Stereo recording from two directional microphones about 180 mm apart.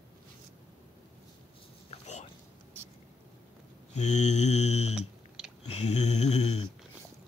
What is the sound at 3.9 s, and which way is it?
Mantra, 40° left (ahead or behind).